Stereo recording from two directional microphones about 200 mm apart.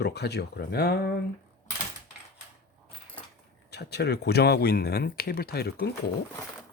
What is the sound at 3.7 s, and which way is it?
Speech, 55° left (ahead or behind).